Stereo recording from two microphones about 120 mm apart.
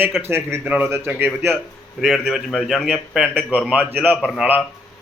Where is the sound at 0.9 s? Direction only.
20° right (ahead or behind).